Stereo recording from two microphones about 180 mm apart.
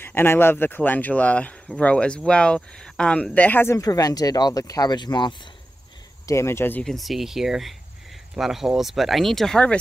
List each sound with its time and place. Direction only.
0.0 s speech: 10° left (ahead or behind)